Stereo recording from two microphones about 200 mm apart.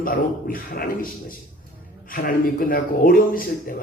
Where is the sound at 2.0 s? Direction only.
45° left (ahead or behind).